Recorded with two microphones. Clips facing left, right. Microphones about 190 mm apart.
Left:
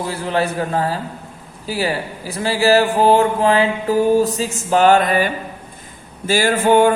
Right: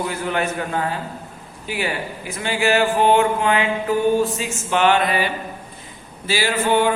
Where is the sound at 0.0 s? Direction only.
30° left (ahead or behind).